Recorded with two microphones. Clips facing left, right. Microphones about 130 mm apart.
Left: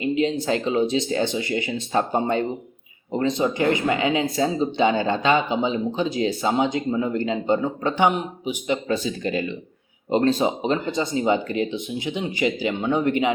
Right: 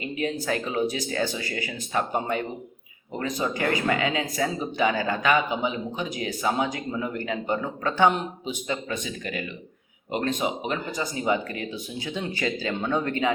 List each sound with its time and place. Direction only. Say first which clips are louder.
0.0 s speech: left 7 dB; 25° left (ahead or behind)
8.9 s speech: left 7 dB; 30° left (ahead or behind)